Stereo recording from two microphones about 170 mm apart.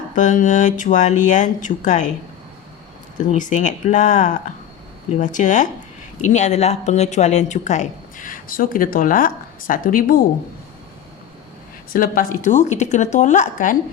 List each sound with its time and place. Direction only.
0.2 s speech: 45° left (ahead or behind)
3.2 s speech: 50° left (ahead or behind)
11.9 s speech: 55° left (ahead or behind)